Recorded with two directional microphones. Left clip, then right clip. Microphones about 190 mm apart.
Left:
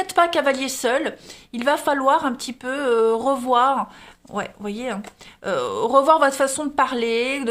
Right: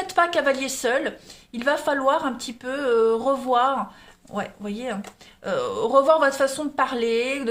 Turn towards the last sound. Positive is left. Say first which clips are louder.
# left 1 dB
turn(degrees=35)  # may be behind; listen again after turning